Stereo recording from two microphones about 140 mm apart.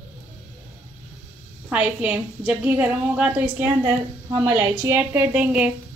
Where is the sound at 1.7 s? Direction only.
10° right (ahead or behind).